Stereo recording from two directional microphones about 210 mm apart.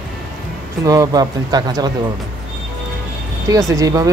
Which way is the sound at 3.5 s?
15° right (ahead or behind).